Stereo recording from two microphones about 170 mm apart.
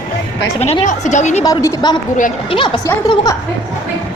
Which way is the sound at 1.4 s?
20° left (ahead or behind).